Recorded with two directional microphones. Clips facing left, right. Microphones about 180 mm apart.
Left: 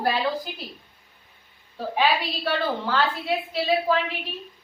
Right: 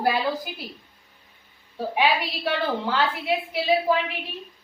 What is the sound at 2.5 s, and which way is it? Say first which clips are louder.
A woman's voice: even; 15° right (ahead or behind).